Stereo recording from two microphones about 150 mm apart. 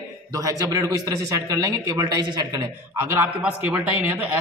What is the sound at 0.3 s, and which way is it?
Speech, 20° right (ahead or behind).